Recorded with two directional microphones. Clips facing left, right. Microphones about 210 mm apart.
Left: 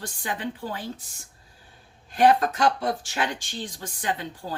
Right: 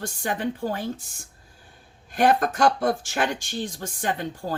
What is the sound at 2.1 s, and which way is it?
Speech, 50° right (ahead or behind).